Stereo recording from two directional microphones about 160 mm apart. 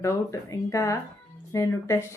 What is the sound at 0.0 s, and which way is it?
Speech, 20° left (ahead or behind).